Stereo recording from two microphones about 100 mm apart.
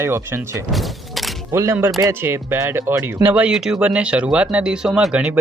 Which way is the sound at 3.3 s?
10° right (ahead or behind).